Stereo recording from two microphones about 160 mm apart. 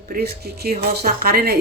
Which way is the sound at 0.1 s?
75° right (ahead or behind).